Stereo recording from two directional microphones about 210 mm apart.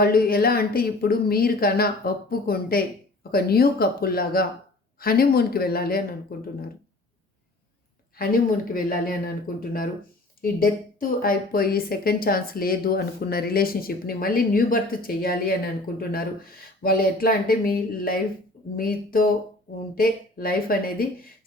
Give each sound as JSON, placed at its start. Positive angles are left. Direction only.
{"t": 0.0, "sound": "speech", "side_deg": 45}
{"t": 8.1, "sound": "speech", "side_deg": 45}
{"t": 11.2, "sound": "speech", "side_deg": 45}